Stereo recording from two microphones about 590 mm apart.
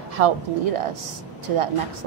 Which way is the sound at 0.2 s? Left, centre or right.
Right.